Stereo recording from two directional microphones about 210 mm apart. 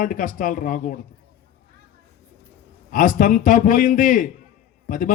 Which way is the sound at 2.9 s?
40° left (ahead or behind).